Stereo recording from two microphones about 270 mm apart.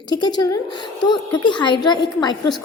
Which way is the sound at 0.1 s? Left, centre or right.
Centre.